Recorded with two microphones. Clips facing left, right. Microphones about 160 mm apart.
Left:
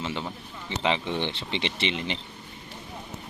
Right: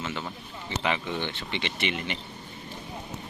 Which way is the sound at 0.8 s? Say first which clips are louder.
Left 3 dB; 25° left (ahead or behind).